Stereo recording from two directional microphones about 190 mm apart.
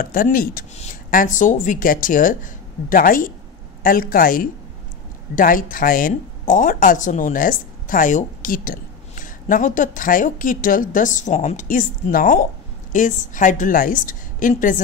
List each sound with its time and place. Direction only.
0.0 s speech: 45° left (ahead or behind)